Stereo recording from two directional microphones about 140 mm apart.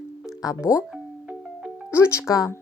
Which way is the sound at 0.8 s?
5° right (ahead or behind).